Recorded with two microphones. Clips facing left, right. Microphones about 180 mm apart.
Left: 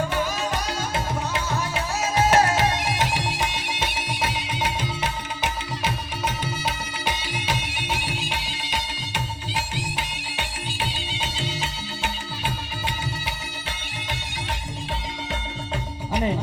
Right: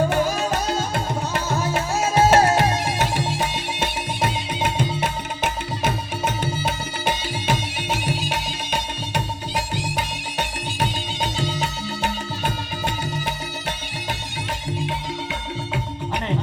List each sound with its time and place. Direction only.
0.9 s music: 50° right (ahead or behind)